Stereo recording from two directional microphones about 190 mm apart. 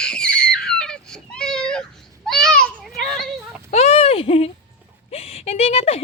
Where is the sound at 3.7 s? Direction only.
35° left (ahead or behind).